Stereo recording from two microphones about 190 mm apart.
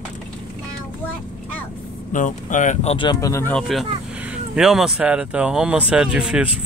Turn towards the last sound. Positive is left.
turn(degrees=-5)  # may be behind; listen again after turning